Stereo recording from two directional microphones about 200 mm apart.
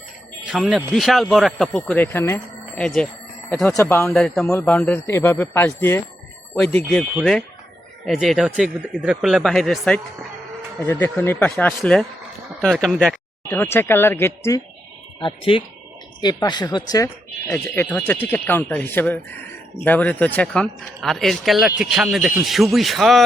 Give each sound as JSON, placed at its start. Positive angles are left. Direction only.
{"t": 0.4, "sound": "speech", "side_deg": -5}
{"t": 15.2, "sound": "speech", "side_deg": 25}
{"t": 17.5, "sound": "speech", "side_deg": 5}